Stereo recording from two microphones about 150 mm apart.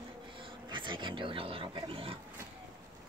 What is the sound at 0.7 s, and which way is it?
Wild animals, 30° right (ahead or behind).